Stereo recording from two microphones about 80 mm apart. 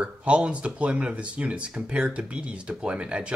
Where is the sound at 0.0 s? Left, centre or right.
Centre.